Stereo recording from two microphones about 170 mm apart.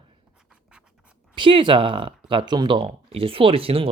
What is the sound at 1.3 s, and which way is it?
Speech, 30° right (ahead or behind).